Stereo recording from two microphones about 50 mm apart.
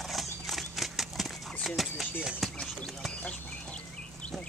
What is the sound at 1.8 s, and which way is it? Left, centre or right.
Speech, centre.